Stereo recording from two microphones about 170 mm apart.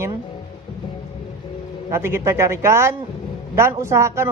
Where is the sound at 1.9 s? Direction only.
15° right (ahead or behind).